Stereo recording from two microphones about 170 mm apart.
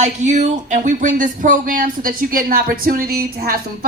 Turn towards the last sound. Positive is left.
turn(degrees=-60)  # may be behind; listen again after turning